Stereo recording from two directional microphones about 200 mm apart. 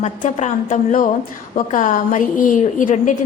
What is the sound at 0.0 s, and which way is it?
A woman's voice, 35° left (ahead or behind).